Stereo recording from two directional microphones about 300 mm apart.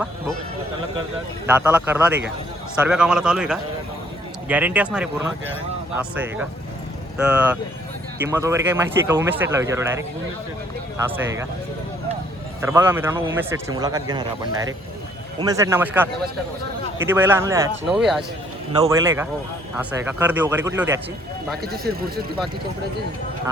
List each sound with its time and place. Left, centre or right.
1.5 s a man's voice: centre
10.9 s a man's voice: centre
12.6 s a man's voice: centre
21.6 s speech: right